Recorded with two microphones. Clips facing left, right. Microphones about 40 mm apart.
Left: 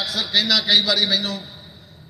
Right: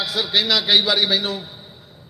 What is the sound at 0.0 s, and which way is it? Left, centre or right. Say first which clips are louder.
A man's voice: right 1 dB; centre.